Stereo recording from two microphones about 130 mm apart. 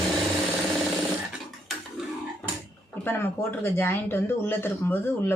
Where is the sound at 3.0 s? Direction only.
15° left (ahead or behind).